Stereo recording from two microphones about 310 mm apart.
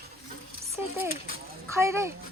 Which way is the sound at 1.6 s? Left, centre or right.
Centre.